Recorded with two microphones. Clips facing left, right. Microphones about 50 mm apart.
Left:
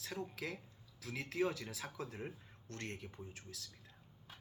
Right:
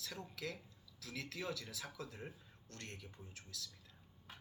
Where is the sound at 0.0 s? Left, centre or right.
Left.